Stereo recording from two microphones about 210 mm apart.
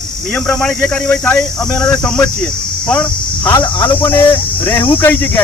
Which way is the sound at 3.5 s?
20° left (ahead or behind).